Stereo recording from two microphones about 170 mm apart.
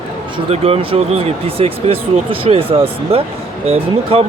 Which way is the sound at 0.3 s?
35° right (ahead or behind).